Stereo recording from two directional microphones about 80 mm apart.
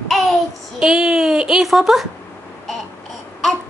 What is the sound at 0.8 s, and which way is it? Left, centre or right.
Speech, centre.